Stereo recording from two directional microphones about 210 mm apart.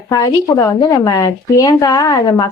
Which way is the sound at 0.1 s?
15° left (ahead or behind).